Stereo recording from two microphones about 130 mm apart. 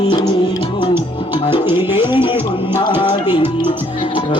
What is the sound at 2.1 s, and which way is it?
Music, 40° left (ahead or behind).